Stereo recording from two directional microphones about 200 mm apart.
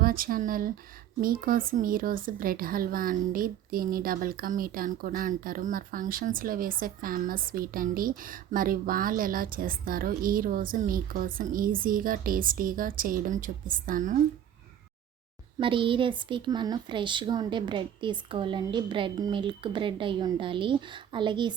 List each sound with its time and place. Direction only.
0.0 s speech: 45° right (ahead or behind)
15.5 s a woman's voice: 25° right (ahead or behind)